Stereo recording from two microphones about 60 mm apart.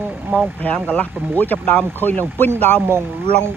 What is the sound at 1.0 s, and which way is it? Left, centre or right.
Speech, left.